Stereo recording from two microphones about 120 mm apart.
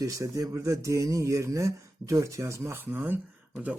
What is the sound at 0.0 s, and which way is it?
Speech, 30° right (ahead or behind).